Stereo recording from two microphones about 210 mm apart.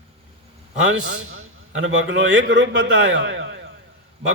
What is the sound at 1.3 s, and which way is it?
A man's voice, 70° right (ahead or behind).